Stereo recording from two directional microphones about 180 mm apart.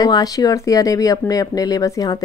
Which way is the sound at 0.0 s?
20° left (ahead or behind).